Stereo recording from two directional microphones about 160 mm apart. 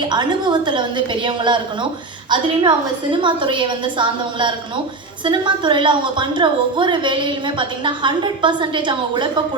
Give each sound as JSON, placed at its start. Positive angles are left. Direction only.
{"t": 0.1, "sound": "a woman's voice", "side_deg": -25}